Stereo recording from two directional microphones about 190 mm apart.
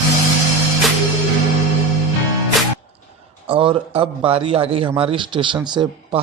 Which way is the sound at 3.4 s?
25° right (ahead or behind).